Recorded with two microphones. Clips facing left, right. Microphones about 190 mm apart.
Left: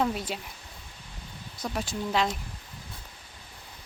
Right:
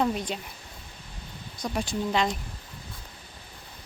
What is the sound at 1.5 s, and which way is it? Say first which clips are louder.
Speech: right 3 dB; 5° left (ahead or behind).